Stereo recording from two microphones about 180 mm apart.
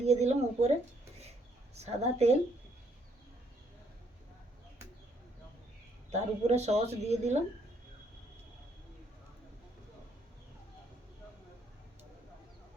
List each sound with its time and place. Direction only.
0.0 s speech: 35° right (ahead or behind)
1.7 s speech: 35° right (ahead or behind)
6.1 s speech: 40° right (ahead or behind)